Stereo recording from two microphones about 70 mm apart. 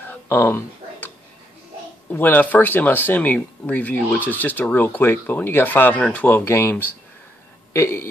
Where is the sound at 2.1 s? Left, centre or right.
Left.